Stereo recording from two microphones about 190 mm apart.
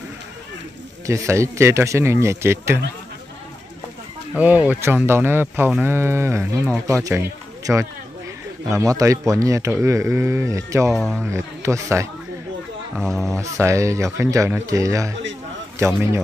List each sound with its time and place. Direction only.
1.0 s speech: 15° right (ahead or behind)
4.4 s speech: 10° right (ahead or behind)
11.0 s speech: centre (ahead or behind)
11.2 s speech: 15° right (ahead or behind)
12.9 s speech: centre (ahead or behind)
13.3 s speech: 15° right (ahead or behind)